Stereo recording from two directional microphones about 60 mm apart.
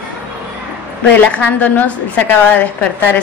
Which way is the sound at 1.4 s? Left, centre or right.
Left.